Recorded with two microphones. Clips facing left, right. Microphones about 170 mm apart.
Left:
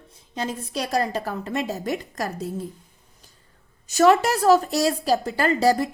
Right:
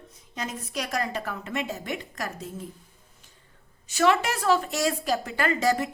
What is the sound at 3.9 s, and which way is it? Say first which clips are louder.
A woman's voice: left 6 dB; 40° left (ahead or behind).